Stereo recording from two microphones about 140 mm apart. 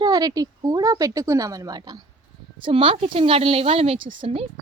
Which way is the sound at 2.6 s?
40° right (ahead or behind).